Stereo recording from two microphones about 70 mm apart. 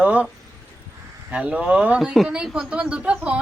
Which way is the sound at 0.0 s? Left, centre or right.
Right.